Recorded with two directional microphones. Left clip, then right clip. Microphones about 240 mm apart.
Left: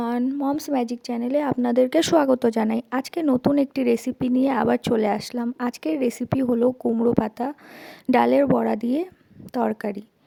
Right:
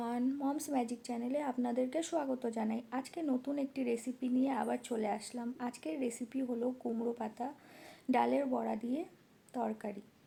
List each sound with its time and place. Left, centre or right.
0.0 s speech: left